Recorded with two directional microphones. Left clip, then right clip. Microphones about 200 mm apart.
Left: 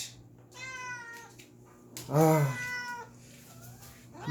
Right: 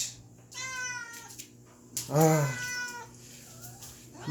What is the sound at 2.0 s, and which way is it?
Speech, centre (ahead or behind).